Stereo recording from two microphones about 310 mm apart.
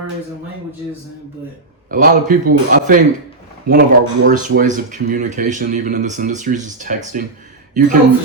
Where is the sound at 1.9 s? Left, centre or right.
Right.